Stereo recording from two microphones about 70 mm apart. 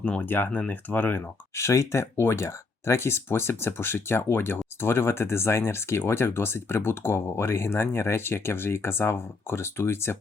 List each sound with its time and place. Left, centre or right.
0.0 s speech: left
1.5 s speech: left